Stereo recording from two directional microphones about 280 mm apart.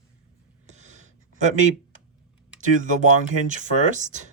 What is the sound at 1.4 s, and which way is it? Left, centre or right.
Speech, right.